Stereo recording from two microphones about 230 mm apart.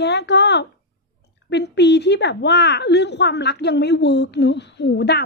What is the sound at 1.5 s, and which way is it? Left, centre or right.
A woman's voice, left.